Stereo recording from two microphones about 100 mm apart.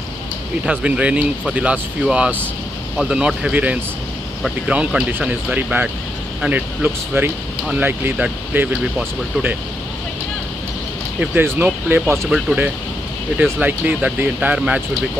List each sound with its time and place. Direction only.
0.7 s speech: 10° right (ahead or behind)
11.1 s speech: 20° right (ahead or behind)
13.4 s speech: 15° right (ahead or behind)